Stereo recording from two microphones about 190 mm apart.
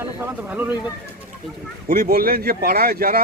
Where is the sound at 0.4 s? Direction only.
10° right (ahead or behind).